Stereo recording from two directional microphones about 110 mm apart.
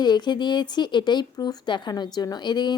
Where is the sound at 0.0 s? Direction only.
40° left (ahead or behind).